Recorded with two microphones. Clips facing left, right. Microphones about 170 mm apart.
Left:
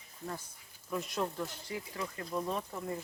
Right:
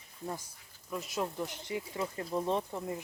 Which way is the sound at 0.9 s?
Centre (ahead or behind).